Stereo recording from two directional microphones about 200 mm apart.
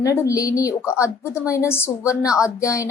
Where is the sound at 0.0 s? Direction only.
15° left (ahead or behind).